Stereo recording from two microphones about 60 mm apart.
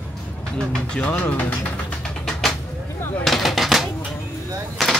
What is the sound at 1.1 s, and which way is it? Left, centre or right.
Speech, left.